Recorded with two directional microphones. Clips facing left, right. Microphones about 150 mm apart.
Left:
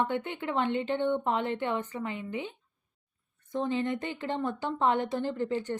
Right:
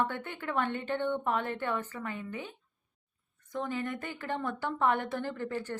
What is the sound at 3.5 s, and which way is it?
A woman's voice, 20° left (ahead or behind).